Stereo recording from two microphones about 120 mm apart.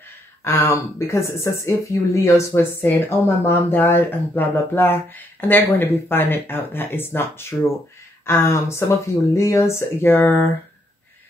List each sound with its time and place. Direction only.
0.4 s speech: 25° left (ahead or behind)